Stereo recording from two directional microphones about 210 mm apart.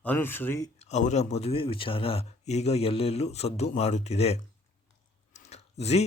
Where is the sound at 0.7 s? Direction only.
30° left (ahead or behind).